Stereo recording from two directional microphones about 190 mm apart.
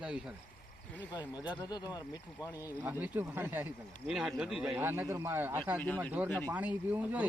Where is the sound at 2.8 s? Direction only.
10° right (ahead or behind).